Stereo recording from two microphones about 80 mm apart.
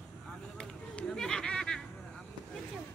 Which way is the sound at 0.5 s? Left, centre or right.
Centre.